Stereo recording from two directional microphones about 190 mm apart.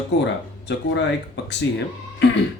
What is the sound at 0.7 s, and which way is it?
Speech, 65° left (ahead or behind).